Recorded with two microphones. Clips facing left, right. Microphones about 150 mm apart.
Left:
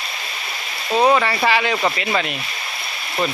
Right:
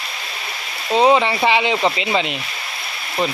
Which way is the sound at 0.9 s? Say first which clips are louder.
Right 2 dB; 20° right (ahead or behind).